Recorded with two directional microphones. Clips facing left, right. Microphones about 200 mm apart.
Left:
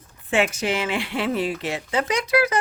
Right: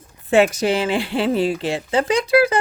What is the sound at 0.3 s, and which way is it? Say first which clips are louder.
Speech: right 6 dB; 40° right (ahead or behind).